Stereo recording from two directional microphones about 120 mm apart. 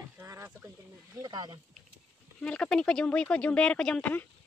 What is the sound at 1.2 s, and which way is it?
Speech, 35° right (ahead or behind).